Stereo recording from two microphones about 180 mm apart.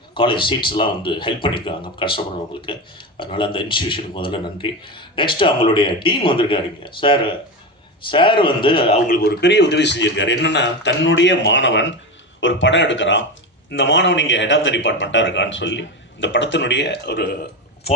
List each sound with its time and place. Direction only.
0.1 s speech: 30° left (ahead or behind)
9.0 s a man's voice: 55° left (ahead or behind)